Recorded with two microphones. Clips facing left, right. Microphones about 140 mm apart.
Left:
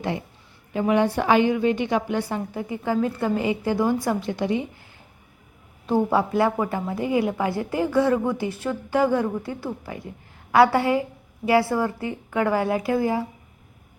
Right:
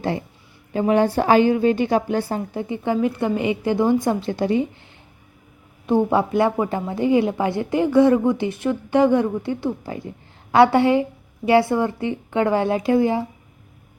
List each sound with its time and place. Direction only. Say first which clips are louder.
0.7 s a woman's voice: right 3 dB; 35° right (ahead or behind)
5.8 s a woman's voice: right 3 dB; 20° right (ahead or behind)